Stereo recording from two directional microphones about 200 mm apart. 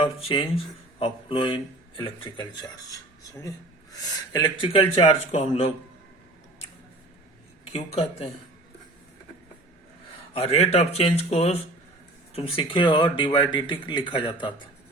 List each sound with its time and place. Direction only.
0.2 s speech: 25° left (ahead or behind)
4.3 s speech: 20° left (ahead or behind)
7.6 s speech: 30° left (ahead or behind)
10.3 s speech: 30° left (ahead or behind)